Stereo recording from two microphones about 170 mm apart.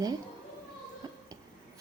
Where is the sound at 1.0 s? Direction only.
25° right (ahead or behind).